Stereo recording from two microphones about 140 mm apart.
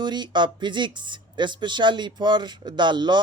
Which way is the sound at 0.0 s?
30° right (ahead or behind).